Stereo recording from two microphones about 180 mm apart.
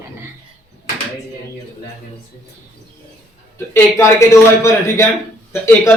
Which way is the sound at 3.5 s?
15° left (ahead or behind).